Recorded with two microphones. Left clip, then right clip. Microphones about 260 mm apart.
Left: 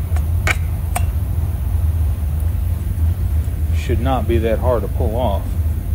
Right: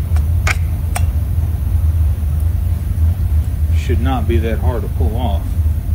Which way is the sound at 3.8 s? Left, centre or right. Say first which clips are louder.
Left 1 dB; left.